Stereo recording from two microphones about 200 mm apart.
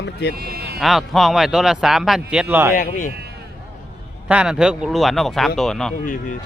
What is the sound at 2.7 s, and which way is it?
Speech, 45° left (ahead or behind).